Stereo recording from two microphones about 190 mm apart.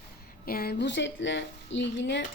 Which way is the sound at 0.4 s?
55° left (ahead or behind).